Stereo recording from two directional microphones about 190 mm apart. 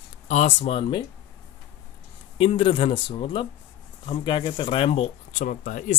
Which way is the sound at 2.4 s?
30° left (ahead or behind).